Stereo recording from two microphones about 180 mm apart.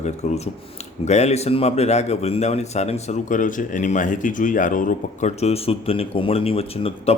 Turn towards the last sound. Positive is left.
turn(degrees=35)  # may be behind; listen again after turning